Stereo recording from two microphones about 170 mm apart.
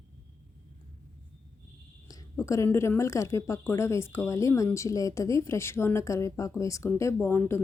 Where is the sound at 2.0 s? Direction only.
20° left (ahead or behind).